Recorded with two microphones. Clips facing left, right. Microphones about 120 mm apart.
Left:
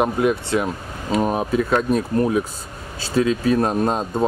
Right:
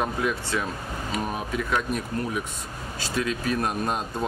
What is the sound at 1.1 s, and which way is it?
Speech, 40° left (ahead or behind).